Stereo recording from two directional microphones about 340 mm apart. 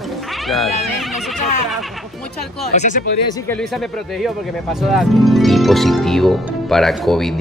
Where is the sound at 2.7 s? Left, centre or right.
Left.